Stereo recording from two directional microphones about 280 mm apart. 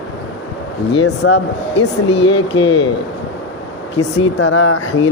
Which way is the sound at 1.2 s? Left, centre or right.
Left.